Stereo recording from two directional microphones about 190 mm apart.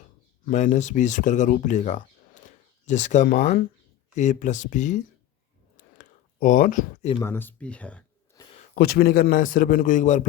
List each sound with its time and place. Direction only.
0.4 s speech: 45° left (ahead or behind)
5.7 s a sound: 45° left (ahead or behind)
7.2 s speech: 10° left (ahead or behind)
8.7 s a man's voice: 55° left (ahead or behind)